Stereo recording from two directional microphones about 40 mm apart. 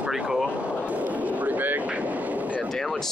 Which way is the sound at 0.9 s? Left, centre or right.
Right.